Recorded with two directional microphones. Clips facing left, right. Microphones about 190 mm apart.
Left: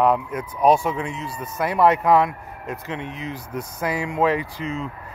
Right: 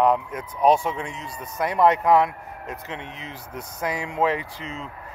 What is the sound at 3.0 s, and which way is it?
Speech, 10° left (ahead or behind).